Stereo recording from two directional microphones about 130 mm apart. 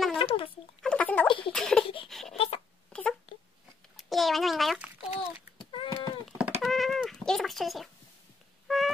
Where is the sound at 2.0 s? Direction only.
Centre (ahead or behind).